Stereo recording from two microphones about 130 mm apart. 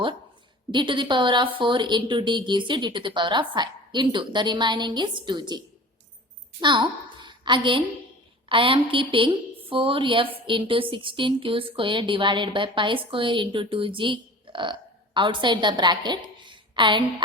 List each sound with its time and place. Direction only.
0.7 s speech: 35° right (ahead or behind)
7.3 s a sound: 40° right (ahead or behind)
8.4 s speech: 40° right (ahead or behind)